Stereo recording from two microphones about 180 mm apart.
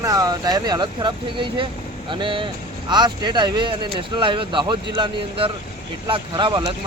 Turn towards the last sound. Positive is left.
turn(degrees=-25)  # may be behind; listen again after turning